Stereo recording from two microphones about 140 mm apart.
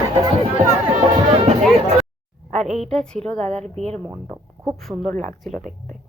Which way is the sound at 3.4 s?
50° right (ahead or behind).